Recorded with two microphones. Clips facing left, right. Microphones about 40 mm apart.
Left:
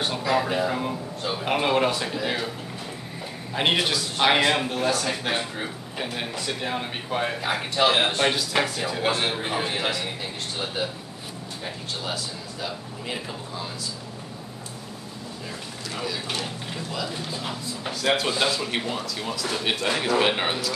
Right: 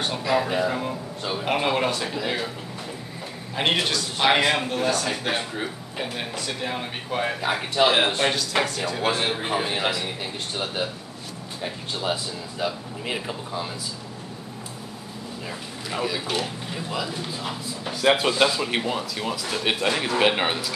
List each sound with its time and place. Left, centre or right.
0.0 s a man's voice: centre
3.5 s a man's voice: centre
12.0 s speech: right
15.9 s a man's voice: centre